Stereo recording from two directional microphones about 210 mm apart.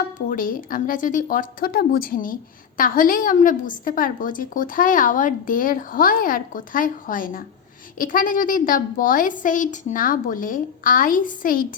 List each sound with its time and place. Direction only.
0.3 s speech: 40° left (ahead or behind)